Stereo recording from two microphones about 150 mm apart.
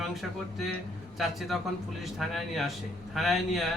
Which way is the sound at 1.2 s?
Centre (ahead or behind).